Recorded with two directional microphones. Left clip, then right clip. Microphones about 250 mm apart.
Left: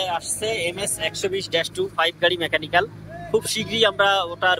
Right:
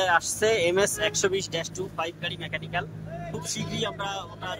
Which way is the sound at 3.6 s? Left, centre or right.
Centre.